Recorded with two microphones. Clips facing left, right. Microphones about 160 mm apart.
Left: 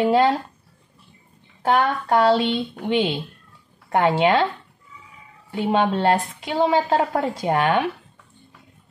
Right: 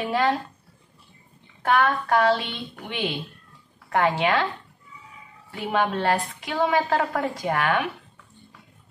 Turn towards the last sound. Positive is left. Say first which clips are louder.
# left 4 dB
turn(degrees=30)  # may be behind; listen again after turning